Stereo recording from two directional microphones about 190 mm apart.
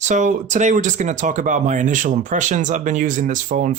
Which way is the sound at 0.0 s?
40° right (ahead or behind).